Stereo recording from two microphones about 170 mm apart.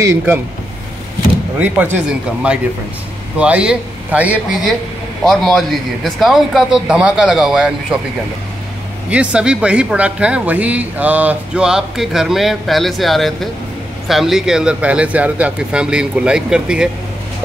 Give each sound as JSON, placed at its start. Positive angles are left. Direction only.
{"t": 0.0, "sound": "speech", "side_deg": -10}
{"t": 1.6, "sound": "speech", "side_deg": -10}
{"t": 9.1, "sound": "speech", "side_deg": -5}